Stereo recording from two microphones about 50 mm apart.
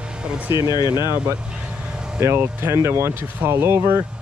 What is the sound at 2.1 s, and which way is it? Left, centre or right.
Speech, right.